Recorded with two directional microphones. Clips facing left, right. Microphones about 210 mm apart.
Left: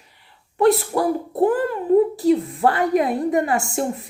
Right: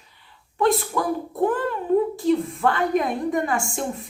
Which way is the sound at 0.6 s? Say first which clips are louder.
Left 4 dB; 40° left (ahead or behind).